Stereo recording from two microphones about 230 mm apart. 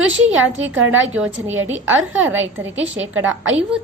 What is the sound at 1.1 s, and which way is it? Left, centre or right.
Speech, centre.